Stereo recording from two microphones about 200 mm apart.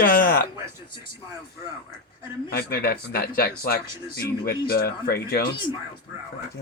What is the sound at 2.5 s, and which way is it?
Speech, 50° left (ahead or behind).